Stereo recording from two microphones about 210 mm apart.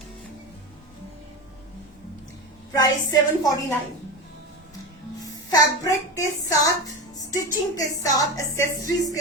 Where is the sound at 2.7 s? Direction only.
20° left (ahead or behind).